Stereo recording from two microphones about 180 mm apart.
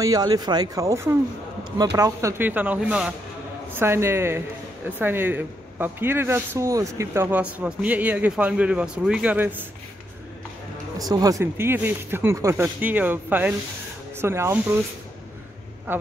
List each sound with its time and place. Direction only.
0.0 s speech: 20° right (ahead or behind)
11.0 s speech: 20° right (ahead or behind)
15.9 s speech: 10° right (ahead or behind)